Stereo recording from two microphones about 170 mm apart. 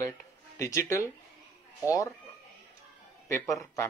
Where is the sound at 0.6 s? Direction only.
20° left (ahead or behind).